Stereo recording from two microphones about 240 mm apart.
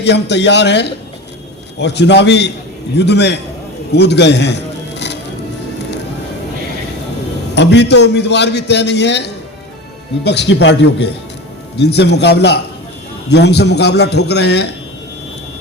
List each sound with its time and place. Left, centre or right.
0.0 s a man's voice: left
7.5 s a man's voice: left